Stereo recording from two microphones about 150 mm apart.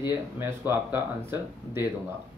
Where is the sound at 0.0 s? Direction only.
15° right (ahead or behind).